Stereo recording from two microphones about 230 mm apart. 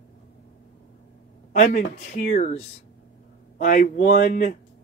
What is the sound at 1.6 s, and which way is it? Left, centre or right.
Speech, left.